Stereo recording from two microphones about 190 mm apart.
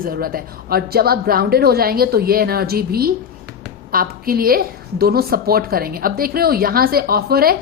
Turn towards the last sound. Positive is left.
turn(degrees=-55)  # may be behind; listen again after turning